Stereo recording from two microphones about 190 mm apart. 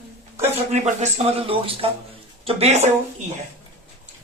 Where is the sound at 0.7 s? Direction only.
35° right (ahead or behind).